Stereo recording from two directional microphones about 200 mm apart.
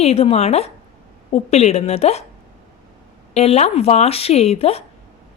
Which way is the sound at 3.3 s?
30° left (ahead or behind).